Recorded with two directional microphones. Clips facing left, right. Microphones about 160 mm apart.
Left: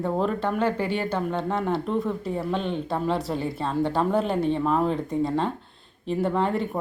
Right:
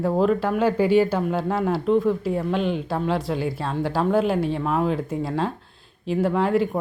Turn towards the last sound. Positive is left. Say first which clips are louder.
# right 4 dB
turn(degrees=-5)  # may be behind; listen again after turning